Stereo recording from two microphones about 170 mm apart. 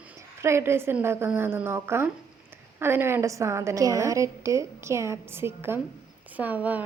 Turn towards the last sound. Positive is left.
turn(degrees=-10)  # may be behind; listen again after turning